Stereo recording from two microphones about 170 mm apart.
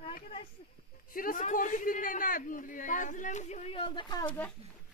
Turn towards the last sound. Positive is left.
turn(degrees=25)  # may be behind; listen again after turning